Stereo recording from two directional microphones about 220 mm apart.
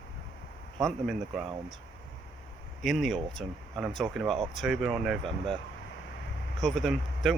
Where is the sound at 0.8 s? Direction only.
Centre (ahead or behind).